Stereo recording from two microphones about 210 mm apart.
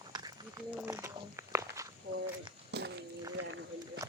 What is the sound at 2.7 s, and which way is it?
Walk, 55° right (ahead or behind).